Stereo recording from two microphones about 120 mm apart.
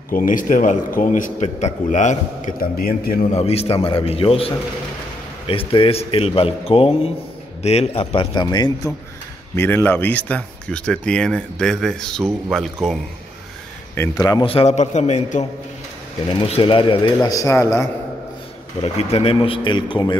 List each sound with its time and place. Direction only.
0.3 s a man's voice: 90° left
3.2 s a man's voice: 60° left (ahead or behind); by 8.9 s 35° left (ahead or behind)
9.6 s speech: 15° left (ahead or behind)
13.9 s a man's voice: 20° left (ahead or behind)
14.4 s a man's voice: 50° left (ahead or behind)
14.8 s a man's voice: 70° left (ahead or behind)
16.3 s a man's voice: 50° left (ahead or behind)
17.2 s a man's voice: 30° left (ahead or behind)
18.8 s a man's voice: 60° left (ahead or behind); by 20.2 s 40° left (ahead or behind)